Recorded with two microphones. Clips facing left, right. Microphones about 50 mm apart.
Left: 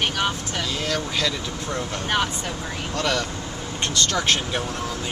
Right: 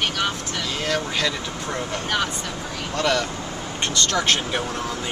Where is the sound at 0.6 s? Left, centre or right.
Centre.